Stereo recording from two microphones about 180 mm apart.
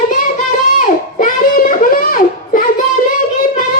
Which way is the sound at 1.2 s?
50° left (ahead or behind).